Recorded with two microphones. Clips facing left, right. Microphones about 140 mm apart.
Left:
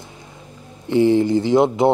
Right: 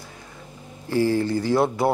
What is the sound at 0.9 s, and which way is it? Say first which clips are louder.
Speech: left 6 dB; 20° left (ahead or behind).